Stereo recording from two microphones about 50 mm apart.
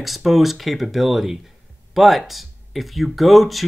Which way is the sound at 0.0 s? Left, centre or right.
Centre.